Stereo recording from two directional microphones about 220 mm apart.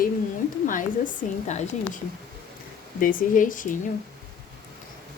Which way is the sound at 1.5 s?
30° left (ahead or behind).